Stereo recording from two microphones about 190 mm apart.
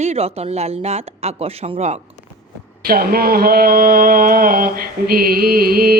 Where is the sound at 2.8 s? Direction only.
50° right (ahead or behind).